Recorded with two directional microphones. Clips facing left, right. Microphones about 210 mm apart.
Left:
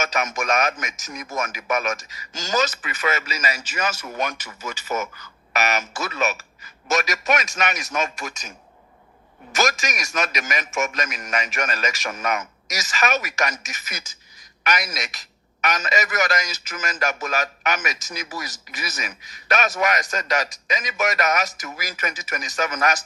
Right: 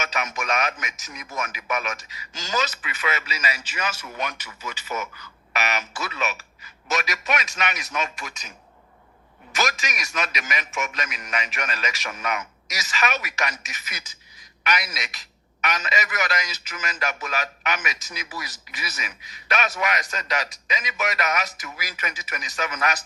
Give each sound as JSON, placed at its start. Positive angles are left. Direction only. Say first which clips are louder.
{"t": 0.0, "sound": "speech", "louder": "left 4 dB", "side_deg": 45}